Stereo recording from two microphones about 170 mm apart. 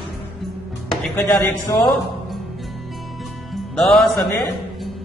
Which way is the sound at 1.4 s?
20° left (ahead or behind).